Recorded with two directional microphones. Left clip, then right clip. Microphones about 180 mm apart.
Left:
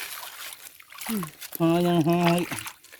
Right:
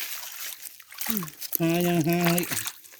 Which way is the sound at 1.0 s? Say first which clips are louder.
Left 1 dB; 45° right (ahead or behind).